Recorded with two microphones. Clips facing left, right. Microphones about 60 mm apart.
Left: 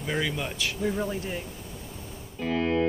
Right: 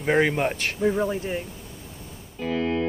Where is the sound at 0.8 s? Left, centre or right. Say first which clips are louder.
Right 6 dB; centre.